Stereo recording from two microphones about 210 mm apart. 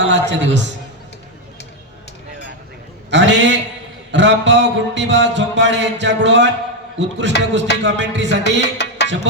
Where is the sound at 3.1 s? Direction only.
60° right (ahead or behind).